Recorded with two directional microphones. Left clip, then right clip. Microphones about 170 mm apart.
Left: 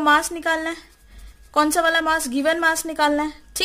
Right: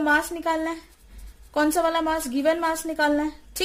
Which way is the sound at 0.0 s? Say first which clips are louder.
Left 4 dB; 45° left (ahead or behind).